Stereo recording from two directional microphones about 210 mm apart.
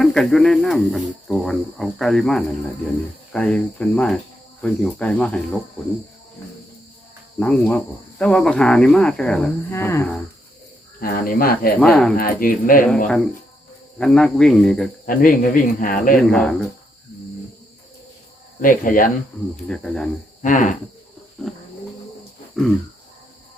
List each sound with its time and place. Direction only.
0.0 s speech: centre (ahead or behind)
7.3 s speech: 5° left (ahead or behind)
11.0 s speech: 45° left (ahead or behind)
11.8 s speech: 5° left (ahead or behind)
12.1 s speech: 45° left (ahead or behind)
14.0 s speech: 5° left (ahead or behind)
15.0 s speech: 40° left (ahead or behind)
16.3 s speech: 5° left (ahead or behind)
18.6 s speech: 40° left (ahead or behind)
19.6 s speech: 5° left (ahead or behind)
20.4 s speech: 35° left (ahead or behind)
21.4 s speech: centre (ahead or behind)
22.6 s speech: centre (ahead or behind)